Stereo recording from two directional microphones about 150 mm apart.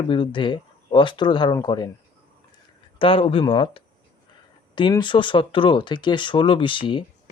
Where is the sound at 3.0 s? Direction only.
35° left (ahead or behind).